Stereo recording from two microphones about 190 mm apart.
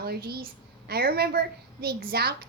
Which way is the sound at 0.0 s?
55° right (ahead or behind).